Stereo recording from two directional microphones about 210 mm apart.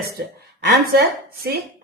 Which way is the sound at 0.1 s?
50° right (ahead or behind).